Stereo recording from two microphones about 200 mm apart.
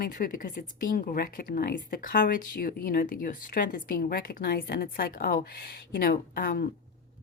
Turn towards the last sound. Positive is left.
turn(degrees=45)  # may be behind; listen again after turning